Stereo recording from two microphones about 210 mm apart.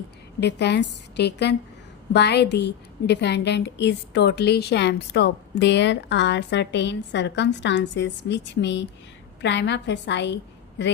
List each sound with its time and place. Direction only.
0.3 s a woman's voice: 55° left (ahead or behind)